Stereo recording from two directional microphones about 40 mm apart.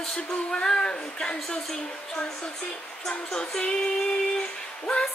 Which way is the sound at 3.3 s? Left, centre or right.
Centre.